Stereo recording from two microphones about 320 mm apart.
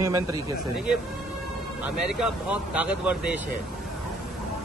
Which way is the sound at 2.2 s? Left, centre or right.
Centre.